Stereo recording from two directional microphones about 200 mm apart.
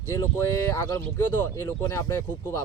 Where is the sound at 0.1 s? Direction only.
15° left (ahead or behind).